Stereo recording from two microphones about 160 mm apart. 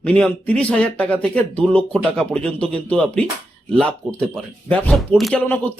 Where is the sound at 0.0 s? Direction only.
10° left (ahead or behind).